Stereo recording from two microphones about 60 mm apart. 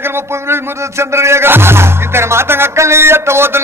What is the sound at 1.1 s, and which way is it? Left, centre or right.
Music, right.